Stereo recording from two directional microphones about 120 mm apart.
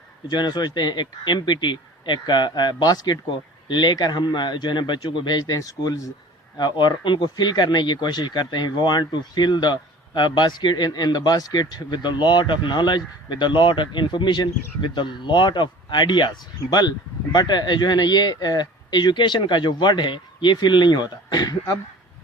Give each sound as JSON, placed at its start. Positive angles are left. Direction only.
{"t": 0.3, "sound": "speech", "side_deg": 40}